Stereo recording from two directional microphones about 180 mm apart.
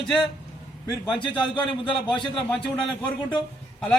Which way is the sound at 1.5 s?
25° left (ahead or behind).